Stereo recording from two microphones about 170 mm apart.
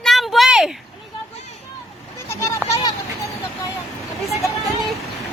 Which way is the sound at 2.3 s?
15° left (ahead or behind).